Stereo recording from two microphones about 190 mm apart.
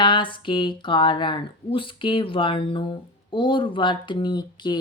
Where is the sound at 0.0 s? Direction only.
25° left (ahead or behind).